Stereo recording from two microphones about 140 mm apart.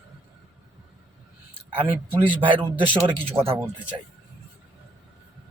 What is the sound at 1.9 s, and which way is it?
Speech, 15° right (ahead or behind).